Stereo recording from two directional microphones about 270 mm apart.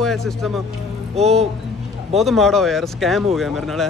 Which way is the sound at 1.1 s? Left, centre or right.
Right.